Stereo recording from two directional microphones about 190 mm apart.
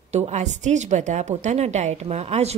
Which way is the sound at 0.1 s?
35° right (ahead or behind).